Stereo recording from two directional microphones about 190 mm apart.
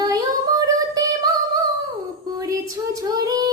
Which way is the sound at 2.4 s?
15° right (ahead or behind).